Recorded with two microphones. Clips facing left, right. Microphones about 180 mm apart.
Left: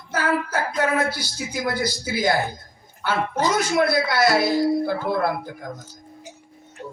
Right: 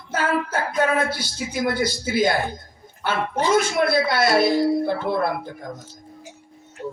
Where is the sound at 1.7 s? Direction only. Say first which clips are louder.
Right 1 dB; 55° right (ahead or behind).